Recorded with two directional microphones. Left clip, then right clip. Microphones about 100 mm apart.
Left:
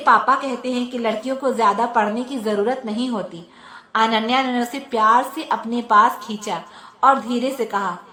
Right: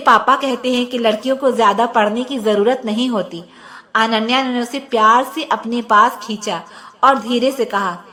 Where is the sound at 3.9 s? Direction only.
20° right (ahead or behind).